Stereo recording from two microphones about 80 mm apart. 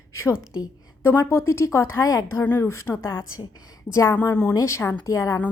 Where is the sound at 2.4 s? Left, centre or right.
Left.